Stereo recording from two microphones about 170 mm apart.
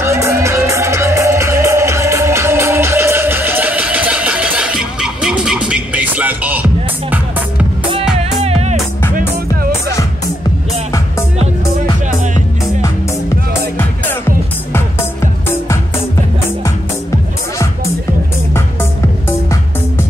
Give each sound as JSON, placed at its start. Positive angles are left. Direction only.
{"t": 0.0, "sound": "music", "side_deg": -15}
{"t": 8.2, "sound": "music", "side_deg": -35}
{"t": 9.8, "sound": "music", "side_deg": 20}
{"t": 18.5, "sound": "music", "side_deg": 15}